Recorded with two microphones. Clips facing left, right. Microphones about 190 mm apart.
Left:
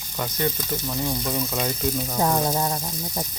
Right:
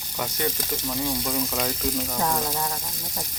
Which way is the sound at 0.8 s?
Centre (ahead or behind).